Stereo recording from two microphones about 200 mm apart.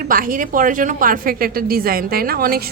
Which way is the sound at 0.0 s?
45° right (ahead or behind).